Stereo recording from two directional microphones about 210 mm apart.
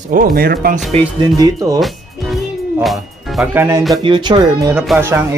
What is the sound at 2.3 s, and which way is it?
Music, centre (ahead or behind).